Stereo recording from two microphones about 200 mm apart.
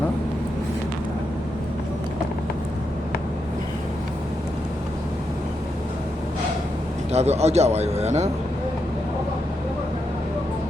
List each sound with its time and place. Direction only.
7.1 s a man's voice: 30° right (ahead or behind)